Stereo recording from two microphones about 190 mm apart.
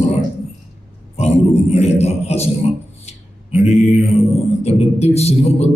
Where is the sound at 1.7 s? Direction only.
35° left (ahead or behind).